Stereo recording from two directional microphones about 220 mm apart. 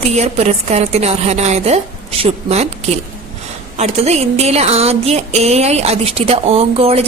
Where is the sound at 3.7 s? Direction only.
30° right (ahead or behind).